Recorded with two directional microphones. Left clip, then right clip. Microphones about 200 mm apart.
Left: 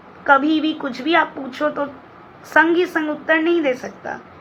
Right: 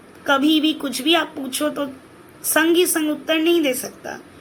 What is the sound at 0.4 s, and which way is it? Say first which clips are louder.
Speech: right 2 dB; 65° right (ahead or behind).